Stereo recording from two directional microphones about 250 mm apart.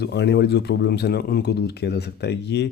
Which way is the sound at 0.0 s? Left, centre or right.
Left.